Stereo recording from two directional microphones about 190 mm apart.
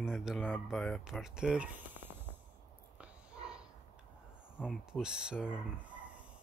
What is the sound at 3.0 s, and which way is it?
Dog, 5° right (ahead or behind).